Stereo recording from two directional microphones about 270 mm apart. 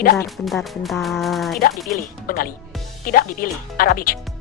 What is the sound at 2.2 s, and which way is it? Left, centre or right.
Speech, left.